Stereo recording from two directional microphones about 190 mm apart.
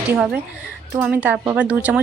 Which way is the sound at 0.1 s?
5° right (ahead or behind).